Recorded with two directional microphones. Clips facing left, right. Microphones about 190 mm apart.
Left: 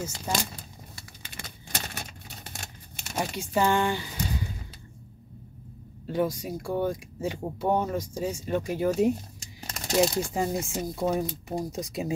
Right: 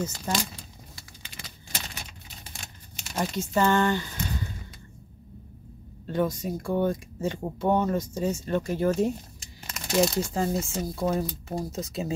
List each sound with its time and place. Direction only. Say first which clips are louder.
1.3 s tearing: left 3 dB; 50° left (ahead or behind)
3.2 s speech: right 1 dB; 10° left (ahead or behind)
6.0 s speech: right 1 dB; 10° left (ahead or behind)
9.6 s a sound: left 2 dB; 35° left (ahead or behind)
10.0 s speech: even; 15° left (ahead or behind)